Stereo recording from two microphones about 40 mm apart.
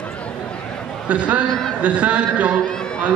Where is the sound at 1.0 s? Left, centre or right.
Right.